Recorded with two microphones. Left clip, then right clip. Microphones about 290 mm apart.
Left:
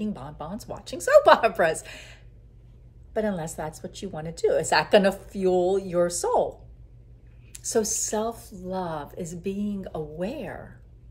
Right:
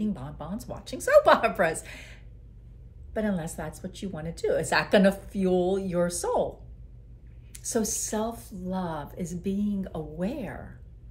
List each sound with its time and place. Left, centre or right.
0.0 s a woman's voice: centre
7.5 s a woman's voice: centre